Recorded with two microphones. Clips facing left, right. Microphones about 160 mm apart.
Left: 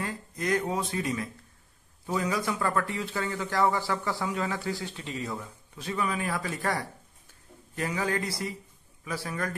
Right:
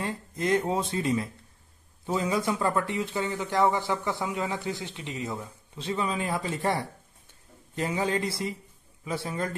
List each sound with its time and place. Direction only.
0.0 s speech: 25° right (ahead or behind)